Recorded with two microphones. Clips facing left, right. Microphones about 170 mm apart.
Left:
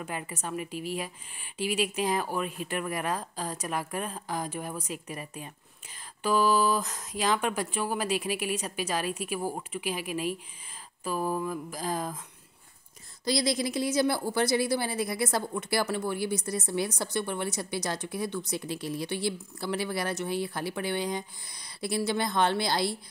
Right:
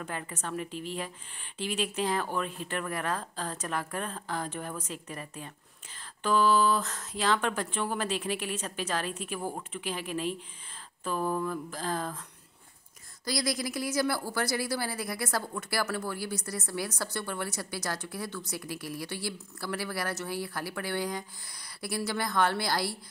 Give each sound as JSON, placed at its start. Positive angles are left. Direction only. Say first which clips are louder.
{"t": 0.0, "sound": "a woman's voice", "louder": "left 1 dB", "side_deg": 10}
{"t": 13.2, "sound": "speech", "louder": "left 4 dB", "side_deg": 25}